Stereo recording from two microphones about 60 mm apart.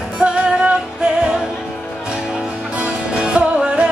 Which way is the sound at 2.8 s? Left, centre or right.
Centre.